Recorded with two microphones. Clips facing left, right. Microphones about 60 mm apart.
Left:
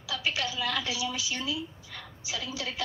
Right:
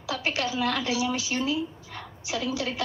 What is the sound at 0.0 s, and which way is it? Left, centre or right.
A woman's voice, right.